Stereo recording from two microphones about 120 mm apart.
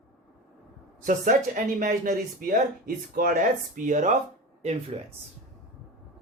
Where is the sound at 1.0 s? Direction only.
90° right.